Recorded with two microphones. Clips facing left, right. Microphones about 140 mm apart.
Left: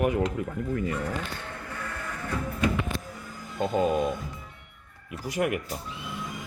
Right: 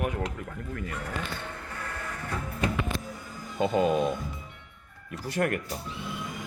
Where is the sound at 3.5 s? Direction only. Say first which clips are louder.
Even; centre (ahead or behind).